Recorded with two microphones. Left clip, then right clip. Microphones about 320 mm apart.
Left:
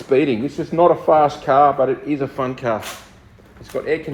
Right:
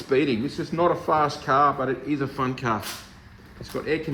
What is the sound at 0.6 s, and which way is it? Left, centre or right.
Speech, left.